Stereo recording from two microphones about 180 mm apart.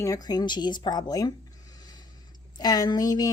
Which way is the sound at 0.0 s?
20° left (ahead or behind).